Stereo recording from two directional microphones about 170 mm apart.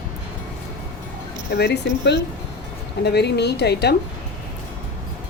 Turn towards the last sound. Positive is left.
turn(degrees=80)